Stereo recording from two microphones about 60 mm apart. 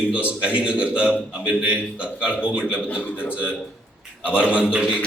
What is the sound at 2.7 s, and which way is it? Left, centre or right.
Speech, left.